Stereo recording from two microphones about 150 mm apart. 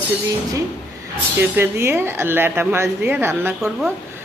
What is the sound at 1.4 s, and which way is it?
Speech, 15° right (ahead or behind).